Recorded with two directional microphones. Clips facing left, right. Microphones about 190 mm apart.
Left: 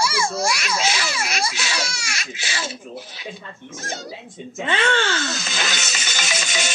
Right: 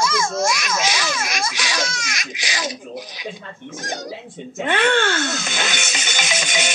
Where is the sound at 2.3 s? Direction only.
15° right (ahead or behind).